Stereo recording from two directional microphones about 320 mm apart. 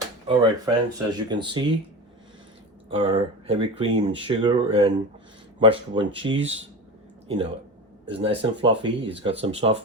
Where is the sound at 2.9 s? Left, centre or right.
Centre.